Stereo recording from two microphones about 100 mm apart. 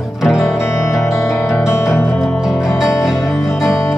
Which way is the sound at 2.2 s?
Centre (ahead or behind).